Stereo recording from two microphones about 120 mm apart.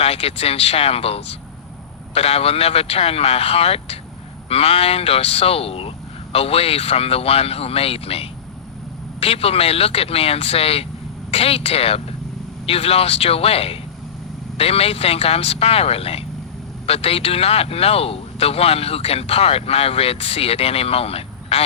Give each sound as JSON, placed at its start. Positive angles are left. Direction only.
{"t": 0.0, "sound": "a man's voice", "side_deg": 55}